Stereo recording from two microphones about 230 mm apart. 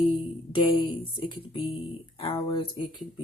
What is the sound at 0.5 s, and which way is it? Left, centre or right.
Speech, left.